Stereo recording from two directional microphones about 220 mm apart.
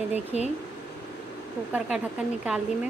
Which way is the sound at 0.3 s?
30° left (ahead or behind).